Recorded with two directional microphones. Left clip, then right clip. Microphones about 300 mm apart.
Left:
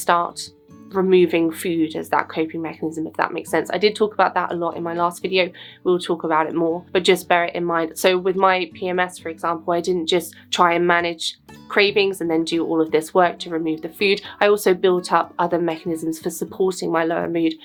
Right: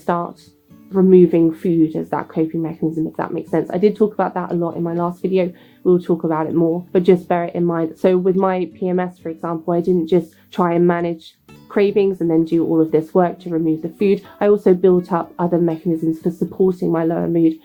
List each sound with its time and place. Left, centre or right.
0.0 s speech: centre
2.8 s speech: left
3.2 s speech: centre
6.9 s speech: centre